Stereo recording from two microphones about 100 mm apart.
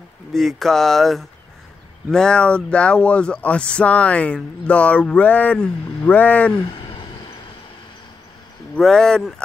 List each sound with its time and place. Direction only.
0.3 s speech: centre (ahead or behind)
6.5 s a sound: 50° left (ahead or behind)
8.7 s speech: 5° left (ahead or behind)